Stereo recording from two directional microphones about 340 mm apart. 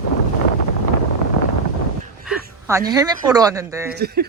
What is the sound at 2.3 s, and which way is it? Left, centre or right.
Speech, centre.